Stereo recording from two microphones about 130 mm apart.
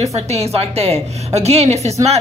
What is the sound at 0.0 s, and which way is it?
A woman's voice, 55° right (ahead or behind).